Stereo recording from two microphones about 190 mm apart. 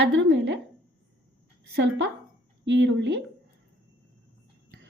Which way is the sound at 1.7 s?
65° right (ahead or behind).